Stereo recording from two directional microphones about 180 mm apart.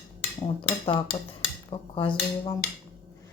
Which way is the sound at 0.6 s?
30° left (ahead or behind).